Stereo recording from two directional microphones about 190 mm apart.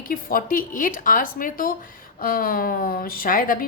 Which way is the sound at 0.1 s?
50° left (ahead or behind).